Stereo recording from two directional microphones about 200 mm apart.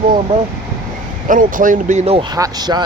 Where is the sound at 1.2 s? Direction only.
40° right (ahead or behind).